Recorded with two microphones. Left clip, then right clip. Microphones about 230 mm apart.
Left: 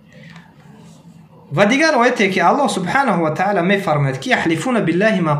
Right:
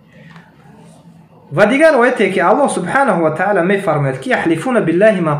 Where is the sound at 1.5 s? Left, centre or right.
Left.